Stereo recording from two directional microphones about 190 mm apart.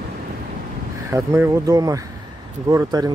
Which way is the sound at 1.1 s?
15° right (ahead or behind).